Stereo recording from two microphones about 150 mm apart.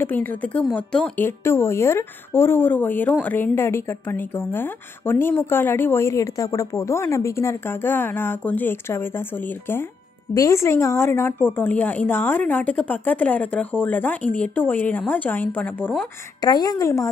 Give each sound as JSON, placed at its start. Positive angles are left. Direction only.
{"t": 0.0, "sound": "a woman's voice", "side_deg": 10}
{"t": 10.3, "sound": "a woman's voice", "side_deg": 20}
{"t": 16.4, "sound": "a woman's voice", "side_deg": 25}